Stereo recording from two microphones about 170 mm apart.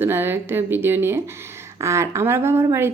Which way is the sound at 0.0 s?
15° right (ahead or behind).